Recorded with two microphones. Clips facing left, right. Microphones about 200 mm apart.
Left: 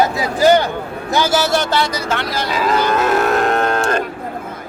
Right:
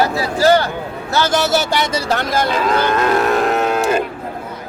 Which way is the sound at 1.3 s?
Centre (ahead or behind).